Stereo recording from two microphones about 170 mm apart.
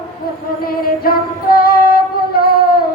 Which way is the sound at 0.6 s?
60° left (ahead or behind).